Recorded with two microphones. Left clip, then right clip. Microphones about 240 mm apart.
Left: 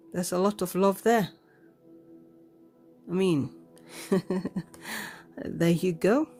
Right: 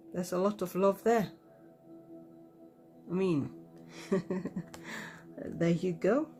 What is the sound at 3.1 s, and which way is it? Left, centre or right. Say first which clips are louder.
Speech: left 5 dB; left.